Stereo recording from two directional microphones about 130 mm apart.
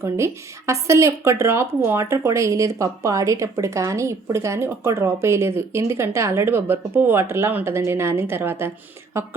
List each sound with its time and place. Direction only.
0.0 s speech: 20° right (ahead or behind)